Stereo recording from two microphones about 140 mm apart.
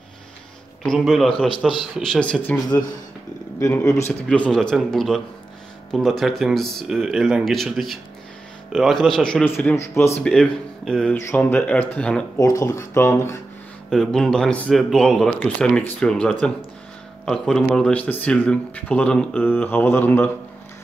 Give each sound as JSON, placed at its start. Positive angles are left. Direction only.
{"t": 0.8, "sound": "speech", "side_deg": 0}
{"t": 11.1, "sound": "speech", "side_deg": 15}
{"t": 12.4, "sound": "speech", "side_deg": 25}
{"t": 13.8, "sound": "speech", "side_deg": 5}